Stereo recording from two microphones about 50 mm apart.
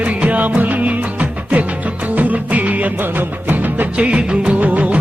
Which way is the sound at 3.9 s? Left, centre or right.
Right.